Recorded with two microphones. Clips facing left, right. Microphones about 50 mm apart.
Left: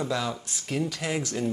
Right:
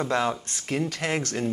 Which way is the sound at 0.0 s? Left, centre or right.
Right.